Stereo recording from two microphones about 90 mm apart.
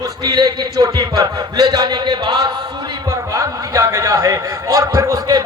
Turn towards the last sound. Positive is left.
turn(degrees=-40)  # may be behind; listen again after turning